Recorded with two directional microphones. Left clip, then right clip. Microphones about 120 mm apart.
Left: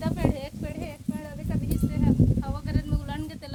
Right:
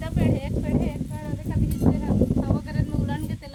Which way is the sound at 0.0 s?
10° left (ahead or behind).